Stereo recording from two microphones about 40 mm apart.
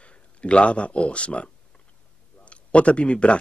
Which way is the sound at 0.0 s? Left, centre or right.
Left.